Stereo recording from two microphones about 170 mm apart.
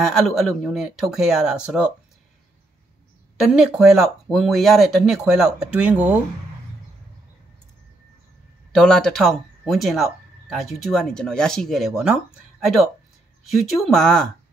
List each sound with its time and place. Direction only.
0.0 s speech: centre (ahead or behind)
3.4 s speech: 5° right (ahead or behind)
8.7 s speech: 5° left (ahead or behind)